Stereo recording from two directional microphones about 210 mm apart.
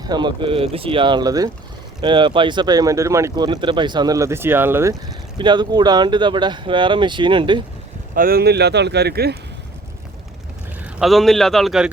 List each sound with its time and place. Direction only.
0.0 s speech: 20° right (ahead or behind)
8.1 s speech: 45° right (ahead or behind)
10.8 s a man's voice: 5° right (ahead or behind)